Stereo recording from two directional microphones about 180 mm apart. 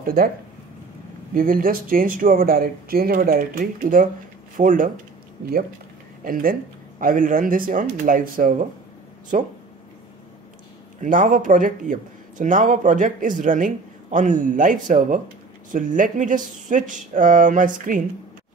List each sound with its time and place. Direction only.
0.0 s speech: 55° right (ahead or behind)
1.3 s speech: 50° right (ahead or behind)
7.0 s speech: 50° right (ahead or behind)
11.0 s speech: 45° right (ahead or behind)